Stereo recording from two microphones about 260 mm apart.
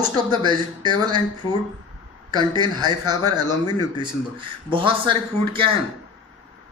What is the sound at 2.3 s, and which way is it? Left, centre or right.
Speech, centre.